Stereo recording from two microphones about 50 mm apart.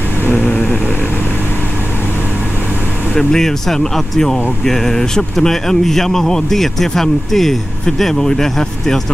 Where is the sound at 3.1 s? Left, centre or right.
Centre.